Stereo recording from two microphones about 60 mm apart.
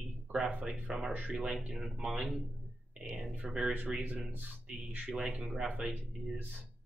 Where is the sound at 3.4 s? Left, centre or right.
Centre.